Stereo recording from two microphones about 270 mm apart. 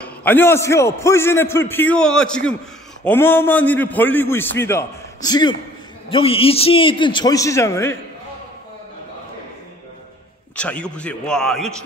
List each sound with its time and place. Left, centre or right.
0.0 s a man's voice: centre
10.5 s a man's voice: centre